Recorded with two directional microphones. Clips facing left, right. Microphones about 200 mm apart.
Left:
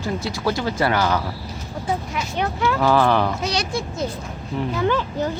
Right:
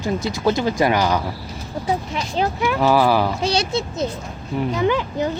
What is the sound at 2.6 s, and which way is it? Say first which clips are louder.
Speech: even; 15° right (ahead or behind).